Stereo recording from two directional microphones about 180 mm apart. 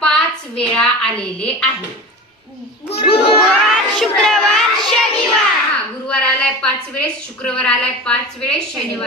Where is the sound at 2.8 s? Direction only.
30° left (ahead or behind).